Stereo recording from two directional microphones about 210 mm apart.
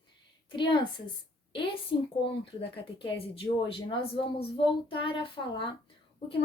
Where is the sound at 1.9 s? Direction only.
25° left (ahead or behind).